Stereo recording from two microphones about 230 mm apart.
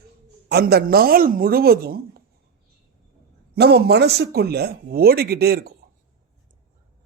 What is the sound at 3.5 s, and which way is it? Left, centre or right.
Speech, right.